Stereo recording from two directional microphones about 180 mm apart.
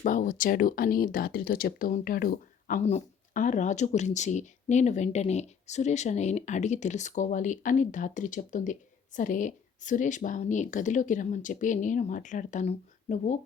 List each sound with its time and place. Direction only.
0.0 s speech: 45° left (ahead or behind)